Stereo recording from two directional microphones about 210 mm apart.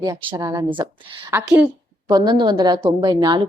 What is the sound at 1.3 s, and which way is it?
A woman's voice, 10° right (ahead or behind).